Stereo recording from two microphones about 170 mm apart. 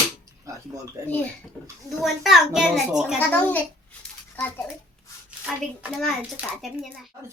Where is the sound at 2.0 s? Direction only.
Centre (ahead or behind).